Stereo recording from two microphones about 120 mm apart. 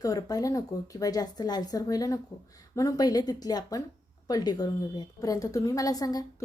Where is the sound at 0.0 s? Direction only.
30° left (ahead or behind).